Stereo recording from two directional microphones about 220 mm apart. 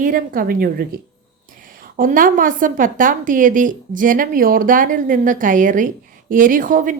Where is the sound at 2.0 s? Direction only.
40° right (ahead or behind).